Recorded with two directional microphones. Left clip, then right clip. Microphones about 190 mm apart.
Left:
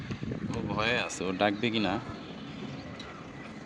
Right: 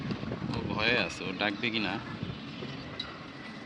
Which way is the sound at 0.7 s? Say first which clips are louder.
Right 1 dB; 50° left (ahead or behind).